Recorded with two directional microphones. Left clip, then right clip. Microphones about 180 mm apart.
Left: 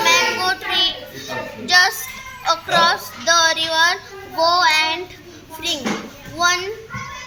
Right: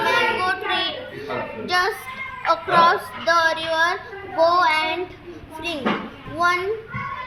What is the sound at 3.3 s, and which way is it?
Child singing, 20° right (ahead or behind).